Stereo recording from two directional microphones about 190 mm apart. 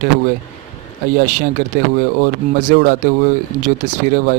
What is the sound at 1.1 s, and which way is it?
Speech, 45° right (ahead or behind).